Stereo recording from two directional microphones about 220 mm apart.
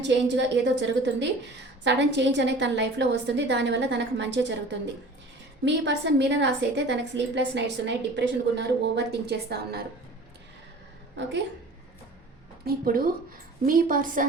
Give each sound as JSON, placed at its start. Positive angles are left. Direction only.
{"t": 0.0, "sound": "a woman's voice", "side_deg": -55}
{"t": 12.6, "sound": "a woman's voice", "side_deg": -40}